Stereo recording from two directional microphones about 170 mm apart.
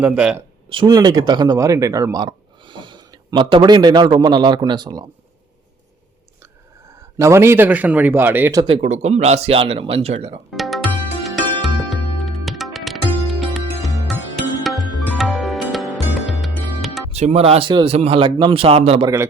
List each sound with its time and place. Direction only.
0.0 s a man's voice: 5° right (ahead or behind)
0.7 s speech: 30° right (ahead or behind)
7.2 s a man's voice: 15° right (ahead or behind)
8.6 s a man's voice: 35° right (ahead or behind)
10.5 s music: centre (ahead or behind)
17.1 s a man's voice: 40° right (ahead or behind)